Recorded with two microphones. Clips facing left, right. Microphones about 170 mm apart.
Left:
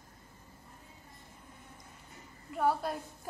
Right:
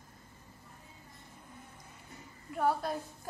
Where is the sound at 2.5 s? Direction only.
Centre (ahead or behind).